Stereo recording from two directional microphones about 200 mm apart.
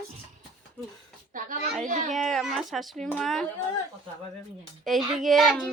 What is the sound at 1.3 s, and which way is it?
Speech, 40° right (ahead or behind).